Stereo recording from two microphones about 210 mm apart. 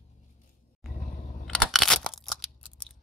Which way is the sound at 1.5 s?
Centre (ahead or behind).